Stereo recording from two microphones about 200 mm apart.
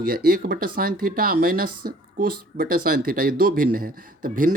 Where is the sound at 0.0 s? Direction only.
50° right (ahead or behind).